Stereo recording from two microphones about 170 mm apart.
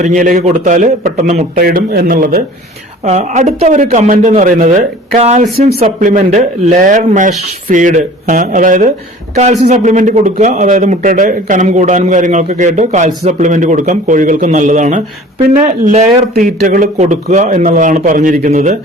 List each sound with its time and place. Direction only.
0.0 s a man's voice: 45° right (ahead or behind)
1.6 s speech: 60° right (ahead or behind)
3.0 s a man's voice: 40° right (ahead or behind)